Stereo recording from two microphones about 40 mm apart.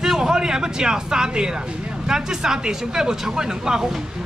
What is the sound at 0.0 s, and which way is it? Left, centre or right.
Speech, centre.